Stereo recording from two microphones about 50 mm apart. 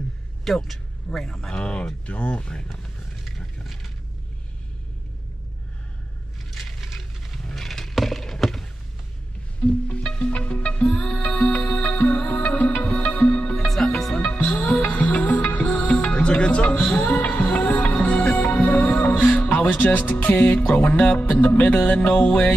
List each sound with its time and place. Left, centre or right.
0.5 s speech: centre
1.5 s music: left
3.6 s a sound: centre
6.5 s a sound: centre
9.9 s music: left
13.7 s music: centre
14.2 s music: left
16.0 s music: left
20.5 s music: left
21.1 s music: left
21.9 s music: left